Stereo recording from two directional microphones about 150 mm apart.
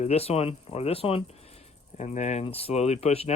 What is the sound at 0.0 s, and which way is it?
Speech, 45° left (ahead or behind).